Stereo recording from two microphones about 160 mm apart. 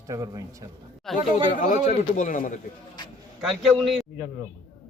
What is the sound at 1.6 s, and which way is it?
A man's voice, 50° left (ahead or behind).